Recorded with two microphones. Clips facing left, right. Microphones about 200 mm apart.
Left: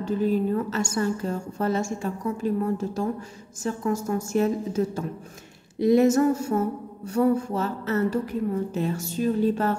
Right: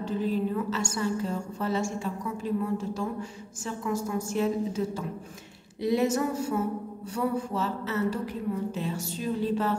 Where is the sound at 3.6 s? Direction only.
45° left (ahead or behind).